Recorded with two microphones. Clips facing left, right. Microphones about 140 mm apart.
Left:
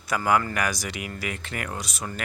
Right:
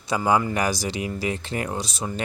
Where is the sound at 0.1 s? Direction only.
25° right (ahead or behind).